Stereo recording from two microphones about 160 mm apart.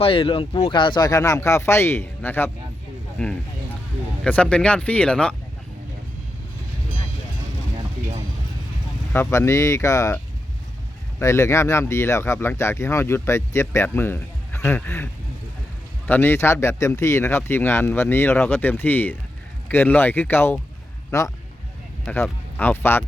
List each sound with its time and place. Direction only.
0.0 s speech: 35° left (ahead or behind); by 5.4 s 5° left (ahead or behind)
9.1 s speech: 15° left (ahead or behind)
11.2 s speech: 15° left (ahead or behind)